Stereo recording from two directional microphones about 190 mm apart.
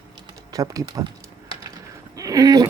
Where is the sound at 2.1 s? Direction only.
20° right (ahead or behind).